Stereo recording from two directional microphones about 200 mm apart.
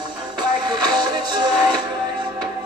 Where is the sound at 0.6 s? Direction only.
20° right (ahead or behind).